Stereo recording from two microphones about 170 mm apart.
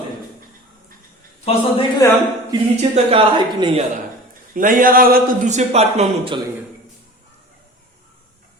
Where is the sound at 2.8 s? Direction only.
30° right (ahead or behind).